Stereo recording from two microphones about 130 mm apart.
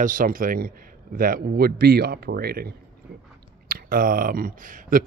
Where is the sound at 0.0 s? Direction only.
90° right.